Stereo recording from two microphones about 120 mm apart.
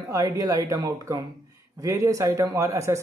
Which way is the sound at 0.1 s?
30° right (ahead or behind).